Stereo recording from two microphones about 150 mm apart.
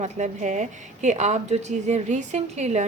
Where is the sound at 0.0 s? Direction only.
55° right (ahead or behind).